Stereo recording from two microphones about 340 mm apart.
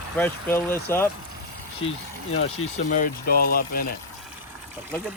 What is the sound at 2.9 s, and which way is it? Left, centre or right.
Speech, left.